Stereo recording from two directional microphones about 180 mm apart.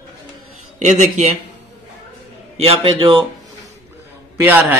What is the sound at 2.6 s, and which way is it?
Speech, 30° right (ahead or behind).